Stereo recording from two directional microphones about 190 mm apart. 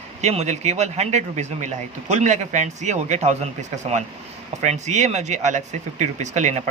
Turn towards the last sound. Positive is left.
turn(degrees=-40)  # may be behind; listen again after turning